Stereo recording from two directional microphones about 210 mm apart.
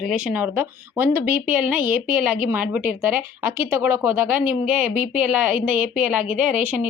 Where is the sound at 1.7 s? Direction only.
40° right (ahead or behind).